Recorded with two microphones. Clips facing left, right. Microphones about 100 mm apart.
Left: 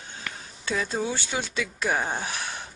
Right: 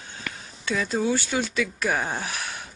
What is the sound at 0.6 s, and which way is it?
Speech, 25° left (ahead or behind).